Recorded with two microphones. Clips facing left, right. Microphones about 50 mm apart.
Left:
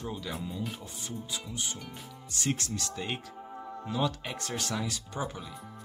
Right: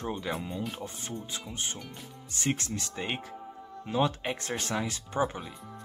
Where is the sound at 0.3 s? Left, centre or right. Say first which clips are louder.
Right 3 dB; right.